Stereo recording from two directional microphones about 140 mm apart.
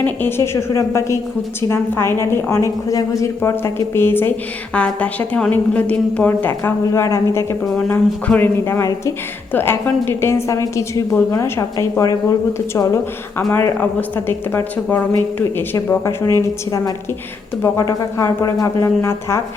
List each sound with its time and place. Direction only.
0.0 s a woman's voice: 15° left (ahead or behind)